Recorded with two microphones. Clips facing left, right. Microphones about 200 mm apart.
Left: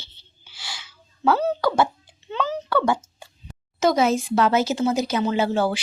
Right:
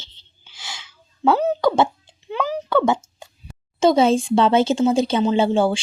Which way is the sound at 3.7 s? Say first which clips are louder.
Right 4 dB; 30° right (ahead or behind).